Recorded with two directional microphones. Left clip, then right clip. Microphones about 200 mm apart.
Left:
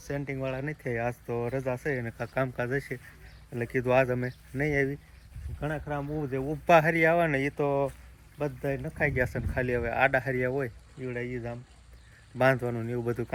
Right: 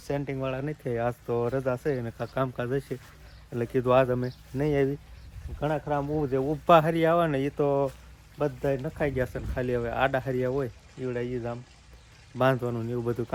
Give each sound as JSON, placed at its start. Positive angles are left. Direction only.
{"t": 0.1, "sound": "speech", "side_deg": -20}